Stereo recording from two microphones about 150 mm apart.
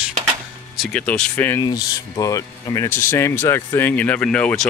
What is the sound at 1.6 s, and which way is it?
Speech, 25° left (ahead or behind).